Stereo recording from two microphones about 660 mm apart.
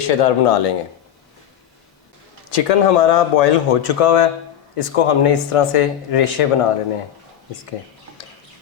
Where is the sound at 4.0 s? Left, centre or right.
Left.